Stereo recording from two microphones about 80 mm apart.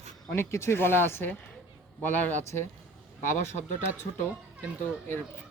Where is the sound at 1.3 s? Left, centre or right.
Left.